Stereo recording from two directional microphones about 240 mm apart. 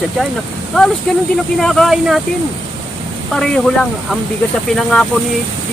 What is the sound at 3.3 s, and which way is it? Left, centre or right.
Speech, centre.